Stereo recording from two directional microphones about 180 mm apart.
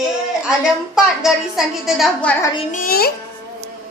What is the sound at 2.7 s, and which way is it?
Speech, 50° left (ahead or behind).